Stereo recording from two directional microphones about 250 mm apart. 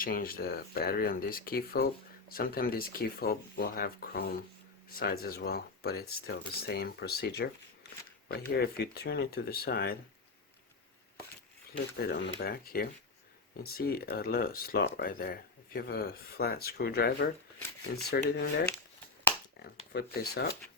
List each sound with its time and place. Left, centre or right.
0.0 s speech: left
11.9 s speech: left